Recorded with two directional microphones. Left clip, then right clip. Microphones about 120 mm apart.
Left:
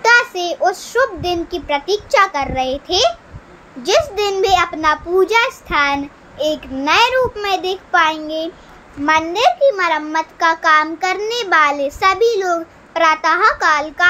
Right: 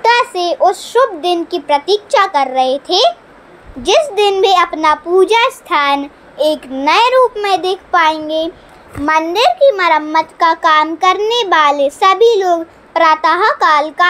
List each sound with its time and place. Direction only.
0.0 s a child's voice: 30° right (ahead or behind)
9.0 s a child's voice: 45° right (ahead or behind)
9.7 s a child's voice: 35° right (ahead or behind)